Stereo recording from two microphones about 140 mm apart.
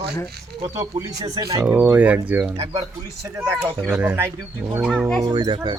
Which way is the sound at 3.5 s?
15° right (ahead or behind).